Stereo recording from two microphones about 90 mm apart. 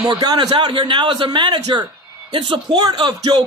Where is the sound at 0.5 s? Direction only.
70° right (ahead or behind).